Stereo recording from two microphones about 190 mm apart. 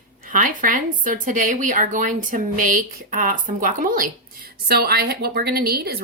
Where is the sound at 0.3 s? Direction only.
45° right (ahead or behind).